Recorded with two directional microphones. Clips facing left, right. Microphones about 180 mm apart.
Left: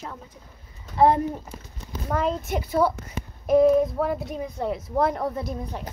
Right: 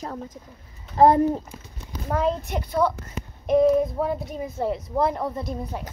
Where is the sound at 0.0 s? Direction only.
40° right (ahead or behind).